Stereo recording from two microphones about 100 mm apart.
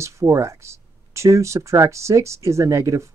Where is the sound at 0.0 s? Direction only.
30° right (ahead or behind).